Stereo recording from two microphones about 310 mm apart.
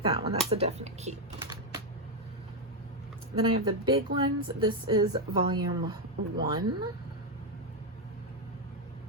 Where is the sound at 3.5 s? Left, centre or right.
Centre.